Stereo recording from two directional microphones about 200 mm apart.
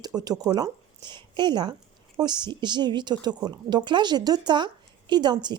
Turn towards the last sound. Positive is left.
turn(degrees=-20)  # may be behind; listen again after turning